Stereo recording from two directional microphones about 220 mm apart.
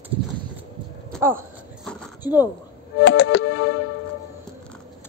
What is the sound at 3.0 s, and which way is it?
Music, 55° left (ahead or behind).